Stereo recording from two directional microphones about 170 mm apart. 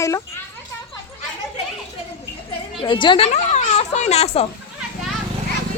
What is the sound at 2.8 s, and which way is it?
Speech, 30° left (ahead or behind).